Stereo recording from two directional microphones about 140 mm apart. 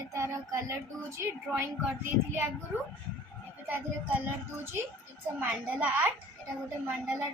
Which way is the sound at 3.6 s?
10° right (ahead or behind).